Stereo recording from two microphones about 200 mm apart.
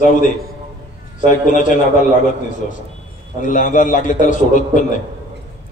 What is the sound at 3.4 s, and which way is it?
A man's voice, 40° left (ahead or behind).